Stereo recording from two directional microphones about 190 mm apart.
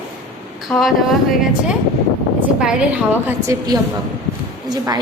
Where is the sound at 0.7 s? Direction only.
Centre (ahead or behind).